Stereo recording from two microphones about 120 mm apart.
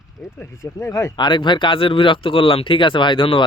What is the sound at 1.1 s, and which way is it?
Speech, 35° left (ahead or behind).